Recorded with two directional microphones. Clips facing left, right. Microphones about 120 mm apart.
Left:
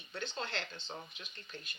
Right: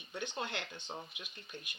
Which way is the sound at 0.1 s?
15° right (ahead or behind).